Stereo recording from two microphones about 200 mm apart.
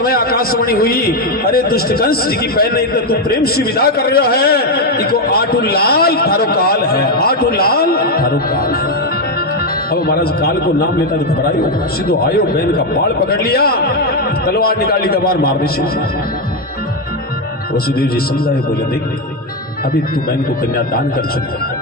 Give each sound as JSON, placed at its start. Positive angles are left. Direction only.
{"t": 0.0, "sound": "a man's voice", "side_deg": 50}
{"t": 9.9, "sound": "a man's voice", "side_deg": 50}
{"t": 12.0, "sound": "a man's voice", "side_deg": 50}